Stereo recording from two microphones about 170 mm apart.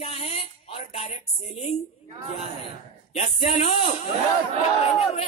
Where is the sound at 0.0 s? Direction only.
35° left (ahead or behind).